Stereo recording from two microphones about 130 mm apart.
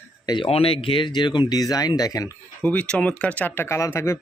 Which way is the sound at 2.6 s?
10° left (ahead or behind).